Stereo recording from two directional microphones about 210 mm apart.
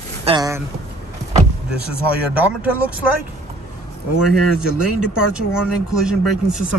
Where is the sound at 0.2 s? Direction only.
25° right (ahead or behind).